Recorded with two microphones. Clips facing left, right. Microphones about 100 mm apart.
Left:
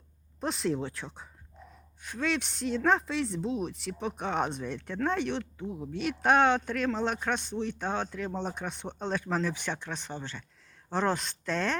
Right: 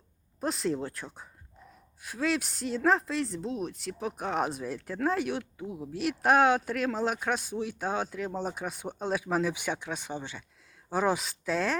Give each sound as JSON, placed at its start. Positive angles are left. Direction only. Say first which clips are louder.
{"t": 0.3, "sound": "a woman's voice", "louder": "even", "side_deg": 0}